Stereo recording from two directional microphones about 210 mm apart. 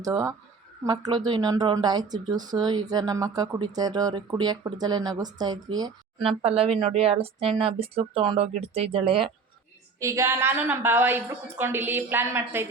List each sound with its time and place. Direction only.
0.0 s a woman's voice: 15° right (ahead or behind)
10.0 s a woman's voice: 15° right (ahead or behind)